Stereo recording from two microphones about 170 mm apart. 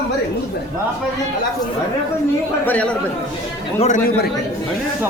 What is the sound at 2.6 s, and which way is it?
Speech, 10° left (ahead or behind).